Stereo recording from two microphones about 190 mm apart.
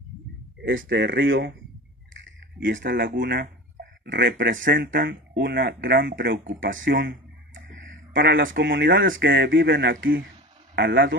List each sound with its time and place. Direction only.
0.6 s speech: 70° right (ahead or behind)
2.6 s speech: 70° right (ahead or behind)
2.9 s speech: 55° right (ahead or behind)
4.0 s speech: 55° right (ahead or behind)
4.5 s speech: 70° right (ahead or behind)
4.7 s speech: 50° right (ahead or behind)
6.5 s speech: 80° right
8.6 s speech: 55° right (ahead or behind)